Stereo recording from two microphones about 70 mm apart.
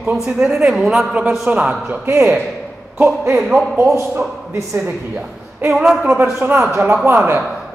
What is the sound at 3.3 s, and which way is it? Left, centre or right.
Speech, centre.